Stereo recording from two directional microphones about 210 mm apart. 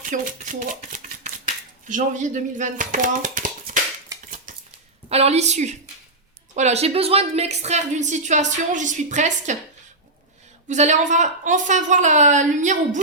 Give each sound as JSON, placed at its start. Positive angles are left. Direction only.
{"t": 0.1, "sound": "a woman's voice", "side_deg": -40}
{"t": 1.9, "sound": "a child's voice", "side_deg": -35}
{"t": 4.5, "sound": "a sound", "side_deg": -40}
{"t": 5.0, "sound": "a woman's voice", "side_deg": -30}
{"t": 10.7, "sound": "a woman's voice", "side_deg": -35}